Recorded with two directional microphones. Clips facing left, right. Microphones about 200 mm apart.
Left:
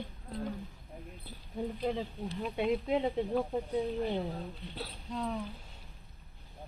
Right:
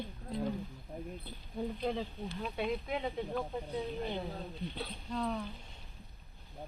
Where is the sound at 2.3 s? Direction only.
25° left (ahead or behind).